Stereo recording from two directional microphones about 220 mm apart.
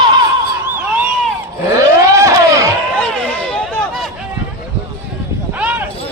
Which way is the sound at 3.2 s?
Centre (ahead or behind).